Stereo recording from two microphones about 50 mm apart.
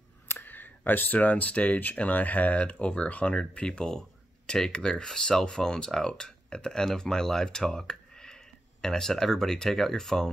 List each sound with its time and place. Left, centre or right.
0.3 s speech: left; by 10.3 s centre